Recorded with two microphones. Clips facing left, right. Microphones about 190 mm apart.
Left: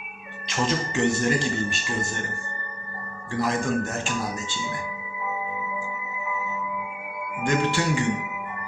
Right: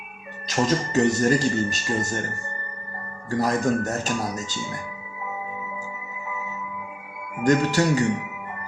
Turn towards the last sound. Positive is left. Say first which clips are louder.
# right 4 dB
turn(degrees=-40)  # may be behind; listen again after turning